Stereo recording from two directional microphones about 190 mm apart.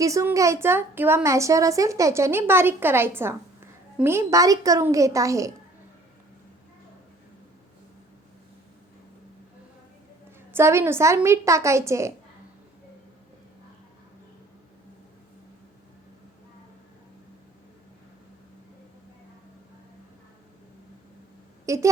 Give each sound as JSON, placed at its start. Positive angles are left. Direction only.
{"t": 0.0, "sound": "a woman's voice", "side_deg": -15}
{"t": 10.5, "sound": "a woman's voice", "side_deg": -15}
{"t": 21.7, "sound": "a woman's voice", "side_deg": -15}